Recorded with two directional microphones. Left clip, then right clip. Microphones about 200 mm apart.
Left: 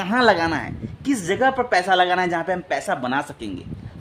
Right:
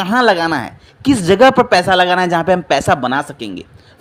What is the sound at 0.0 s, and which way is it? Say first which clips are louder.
Speech: right 5 dB; 10° right (ahead or behind).